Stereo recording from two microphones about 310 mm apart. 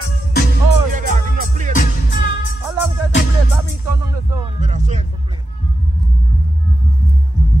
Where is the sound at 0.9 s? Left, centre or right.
Right.